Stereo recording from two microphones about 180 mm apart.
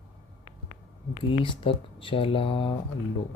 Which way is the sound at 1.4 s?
30° left (ahead or behind).